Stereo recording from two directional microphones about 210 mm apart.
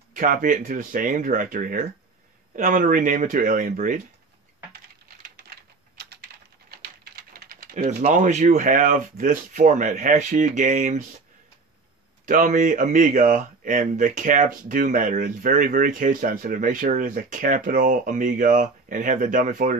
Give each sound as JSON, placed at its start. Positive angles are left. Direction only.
{"t": 0.1, "sound": "speech", "side_deg": -40}
{"t": 6.7, "sound": "speech", "side_deg": -45}
{"t": 12.3, "sound": "speech", "side_deg": -40}